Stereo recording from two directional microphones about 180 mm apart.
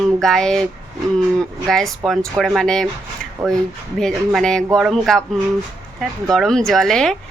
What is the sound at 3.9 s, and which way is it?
Speech, centre (ahead or behind).